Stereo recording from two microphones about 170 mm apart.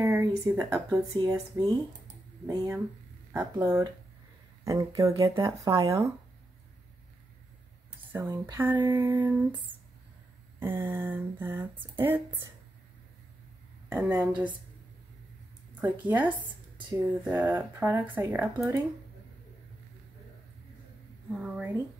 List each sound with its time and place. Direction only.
0.0 s speech: 15° right (ahead or behind)
8.2 s speech: 15° right (ahead or behind)
13.8 s speech: 10° right (ahead or behind)
15.8 s speech: 10° right (ahead or behind)
21.4 s speech: 10° right (ahead or behind)